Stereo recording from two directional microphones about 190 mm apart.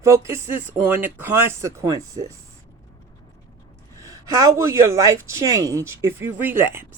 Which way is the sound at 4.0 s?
15° right (ahead or behind).